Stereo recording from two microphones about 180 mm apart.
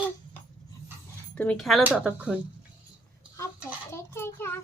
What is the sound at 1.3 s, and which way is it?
Speech, 5° left (ahead or behind).